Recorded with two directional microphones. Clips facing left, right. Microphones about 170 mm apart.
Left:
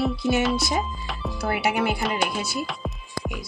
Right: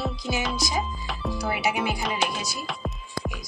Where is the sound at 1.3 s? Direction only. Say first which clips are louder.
Left 3 dB; 60° left (ahead or behind).